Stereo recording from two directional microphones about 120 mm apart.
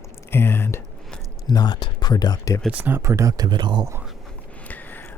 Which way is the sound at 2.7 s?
15° right (ahead or behind).